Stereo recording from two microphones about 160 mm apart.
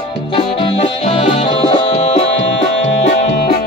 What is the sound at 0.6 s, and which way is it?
Music, 35° left (ahead or behind).